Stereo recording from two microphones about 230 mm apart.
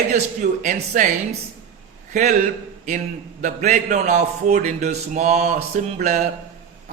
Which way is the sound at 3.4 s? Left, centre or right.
Right.